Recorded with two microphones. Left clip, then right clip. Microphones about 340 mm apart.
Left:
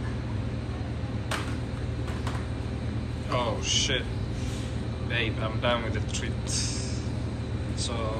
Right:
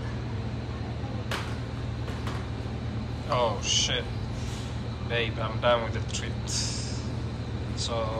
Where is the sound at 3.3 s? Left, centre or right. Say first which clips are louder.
Right 2 dB; centre.